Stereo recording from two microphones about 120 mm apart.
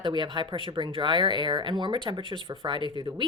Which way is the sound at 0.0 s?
40° right (ahead or behind).